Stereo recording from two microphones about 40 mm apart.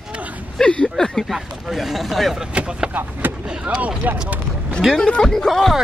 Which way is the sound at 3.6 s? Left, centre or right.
Right.